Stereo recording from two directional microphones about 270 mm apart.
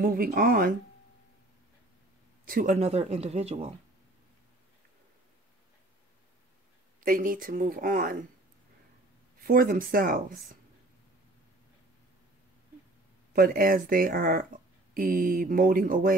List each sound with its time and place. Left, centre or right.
0.0 s speech: right
2.4 s speech: right
7.0 s speech: right
9.4 s speech: right
13.3 s speech: right